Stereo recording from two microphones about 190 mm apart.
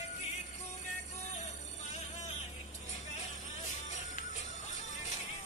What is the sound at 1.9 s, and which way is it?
Music, 35° left (ahead or behind).